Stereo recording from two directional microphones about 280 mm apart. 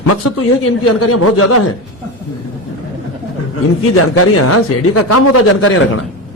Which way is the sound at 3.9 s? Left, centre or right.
Left.